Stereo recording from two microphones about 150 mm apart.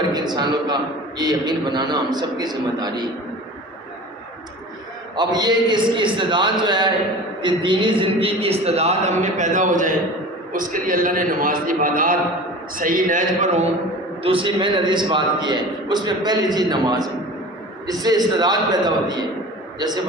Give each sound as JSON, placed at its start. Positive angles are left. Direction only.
{"t": 0.1, "sound": "a man's voice", "side_deg": -30}
{"t": 5.1, "sound": "a man's voice", "side_deg": -30}
{"t": 14.2, "sound": "a man's voice", "side_deg": -35}